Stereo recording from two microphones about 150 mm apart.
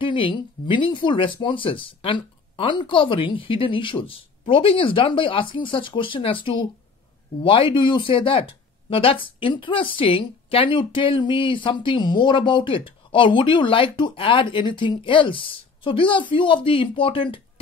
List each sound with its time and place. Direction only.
0.0 s speech: 35° left (ahead or behind)